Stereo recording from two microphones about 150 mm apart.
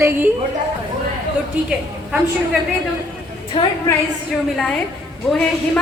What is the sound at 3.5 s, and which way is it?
Speech, 35° left (ahead or behind).